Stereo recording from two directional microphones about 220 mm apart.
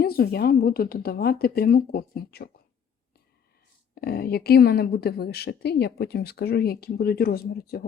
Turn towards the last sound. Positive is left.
turn(degrees=45)  # may be behind; listen again after turning